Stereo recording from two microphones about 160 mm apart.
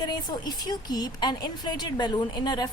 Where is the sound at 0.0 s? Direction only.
25° left (ahead or behind).